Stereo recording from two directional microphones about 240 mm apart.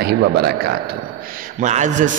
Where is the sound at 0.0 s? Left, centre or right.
Right.